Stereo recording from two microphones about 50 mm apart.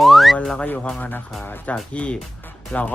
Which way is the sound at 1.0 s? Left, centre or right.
Left.